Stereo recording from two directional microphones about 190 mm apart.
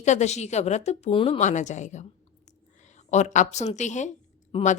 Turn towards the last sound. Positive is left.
turn(degrees=40)  # may be behind; listen again after turning